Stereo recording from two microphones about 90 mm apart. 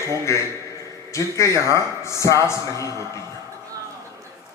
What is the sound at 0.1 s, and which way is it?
A man's voice, 35° left (ahead or behind).